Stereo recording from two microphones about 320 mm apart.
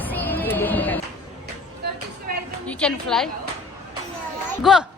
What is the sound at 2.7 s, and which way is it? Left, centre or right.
Speech, centre.